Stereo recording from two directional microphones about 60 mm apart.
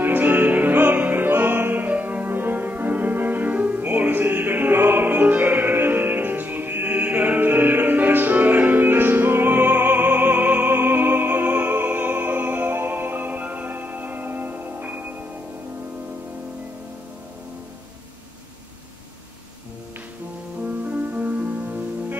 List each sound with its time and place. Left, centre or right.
0.0 s music: right
20.6 s music: right